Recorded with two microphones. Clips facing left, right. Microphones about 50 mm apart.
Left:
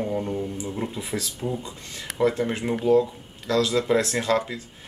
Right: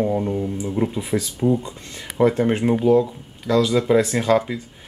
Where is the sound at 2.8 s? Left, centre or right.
Centre.